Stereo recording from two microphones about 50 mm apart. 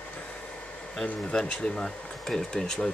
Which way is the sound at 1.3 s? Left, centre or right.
Centre.